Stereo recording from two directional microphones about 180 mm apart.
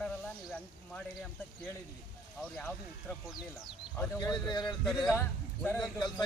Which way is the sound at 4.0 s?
20° left (ahead or behind).